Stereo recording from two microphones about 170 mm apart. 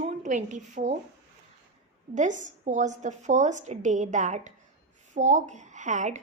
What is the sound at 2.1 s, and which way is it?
A woman's voice, 45° right (ahead or behind).